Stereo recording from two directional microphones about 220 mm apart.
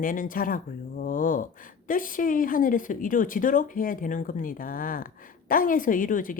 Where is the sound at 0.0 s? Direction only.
40° left (ahead or behind).